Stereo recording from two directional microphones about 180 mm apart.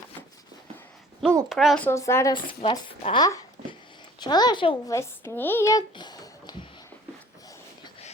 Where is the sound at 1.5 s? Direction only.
Centre (ahead or behind).